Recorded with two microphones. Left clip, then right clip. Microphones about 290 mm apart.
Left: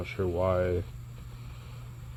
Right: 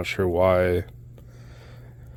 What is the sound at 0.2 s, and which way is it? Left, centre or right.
Speech, right.